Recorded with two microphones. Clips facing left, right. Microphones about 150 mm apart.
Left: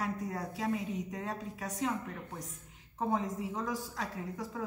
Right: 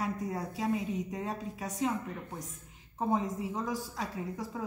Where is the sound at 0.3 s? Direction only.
15° right (ahead or behind).